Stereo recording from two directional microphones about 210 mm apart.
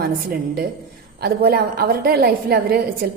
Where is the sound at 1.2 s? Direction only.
45° right (ahead or behind).